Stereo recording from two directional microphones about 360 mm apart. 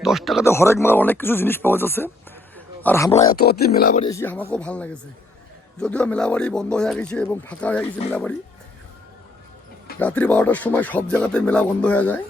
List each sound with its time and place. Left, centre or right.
0.0 s speech: centre
2.6 s wild animals: centre
3.2 s speech: left; by 8.3 s centre
10.0 s speech: centre